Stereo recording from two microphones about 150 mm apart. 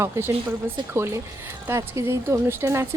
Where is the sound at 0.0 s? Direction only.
15° right (ahead or behind).